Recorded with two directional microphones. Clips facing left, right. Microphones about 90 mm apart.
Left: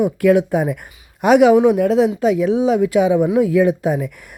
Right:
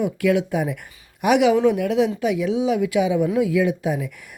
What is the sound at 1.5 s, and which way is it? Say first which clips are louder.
Speech: left 5 dB; 20° left (ahead or behind).